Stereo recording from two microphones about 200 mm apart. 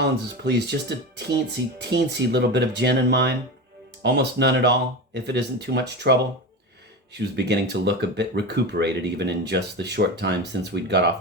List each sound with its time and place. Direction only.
0.0 s speech: 55° right (ahead or behind)